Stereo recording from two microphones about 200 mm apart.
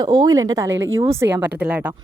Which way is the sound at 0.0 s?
20° right (ahead or behind).